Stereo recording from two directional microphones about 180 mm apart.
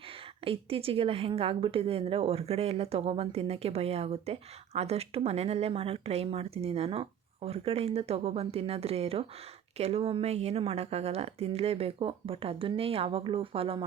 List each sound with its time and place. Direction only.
0.4 s a woman's voice: 30° right (ahead or behind)